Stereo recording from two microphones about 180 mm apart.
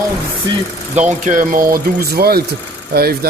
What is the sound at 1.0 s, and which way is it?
Speech, 40° right (ahead or behind).